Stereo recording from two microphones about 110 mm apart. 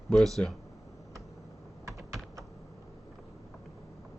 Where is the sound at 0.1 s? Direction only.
5° left (ahead or behind).